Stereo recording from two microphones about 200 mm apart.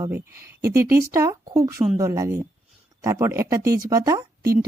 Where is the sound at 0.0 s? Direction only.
15° right (ahead or behind).